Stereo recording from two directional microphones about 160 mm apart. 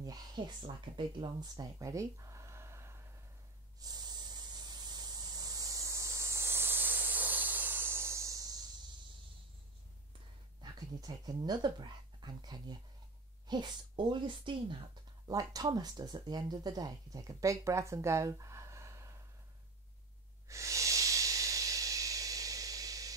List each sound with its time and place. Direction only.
0.0 s speech: 25° right (ahead or behind)
3.8 s spray: 25° right (ahead or behind)
10.6 s speech: 25° right (ahead or behind)
20.4 s hiss: 20° right (ahead or behind)